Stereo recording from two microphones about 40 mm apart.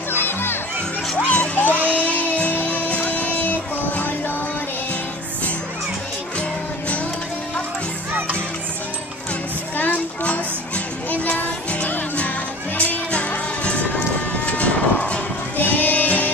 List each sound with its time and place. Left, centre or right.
0.1 s music: left
1.3 s music: left
1.8 s music: right
2.5 s music: left
9.8 s music: left
11.1 s music: left
14.4 s a sound: left
15.5 s music: left